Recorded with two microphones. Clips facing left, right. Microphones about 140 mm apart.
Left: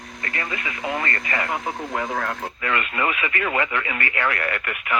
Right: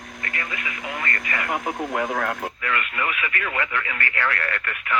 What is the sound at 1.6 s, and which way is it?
Speech, 10° right (ahead or behind).